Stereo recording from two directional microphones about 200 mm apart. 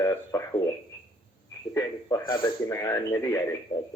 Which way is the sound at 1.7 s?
15° left (ahead or behind).